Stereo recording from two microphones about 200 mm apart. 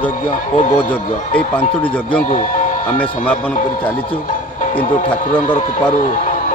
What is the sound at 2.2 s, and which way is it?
Speech, 40° left (ahead or behind).